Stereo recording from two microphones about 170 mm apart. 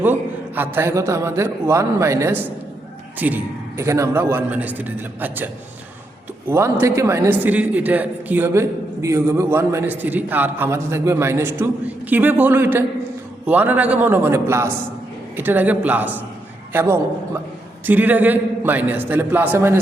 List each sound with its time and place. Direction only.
0.0 s a man's voice: 10° right (ahead or behind)
6.5 s a man's voice: 15° right (ahead or behind)